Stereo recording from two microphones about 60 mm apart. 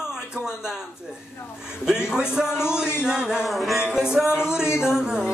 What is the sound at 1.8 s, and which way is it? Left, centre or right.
A man's voice, centre.